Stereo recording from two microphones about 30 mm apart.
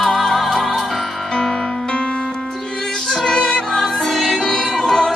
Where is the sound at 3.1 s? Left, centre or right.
Centre.